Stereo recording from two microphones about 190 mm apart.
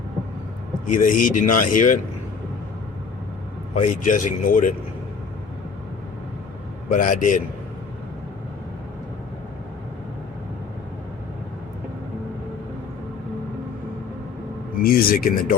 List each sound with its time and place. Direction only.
0.9 s speech: 45° left (ahead or behind)
3.8 s speech: 40° left (ahead or behind)
6.9 s speech: 45° left (ahead or behind)
14.8 s speech: 50° left (ahead or behind)